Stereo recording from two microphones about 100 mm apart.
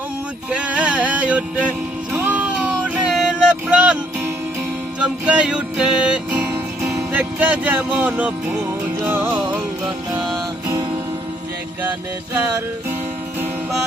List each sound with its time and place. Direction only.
0.5 s music: 10° right (ahead or behind)
2.1 s a sound: 15° right (ahead or behind)
4.9 s speech: 10° right (ahead or behind)
9.0 s music: 25° right (ahead or behind)